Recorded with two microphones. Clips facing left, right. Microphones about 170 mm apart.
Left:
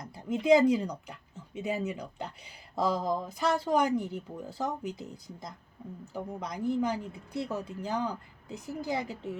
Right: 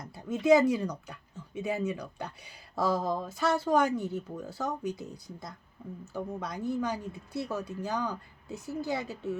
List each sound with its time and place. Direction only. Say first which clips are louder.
0.3 s speech: even; 15° left (ahead or behind)
4.8 s speech: right 3 dB; 20° right (ahead or behind)
5.1 s speech: even; 20° left (ahead or behind)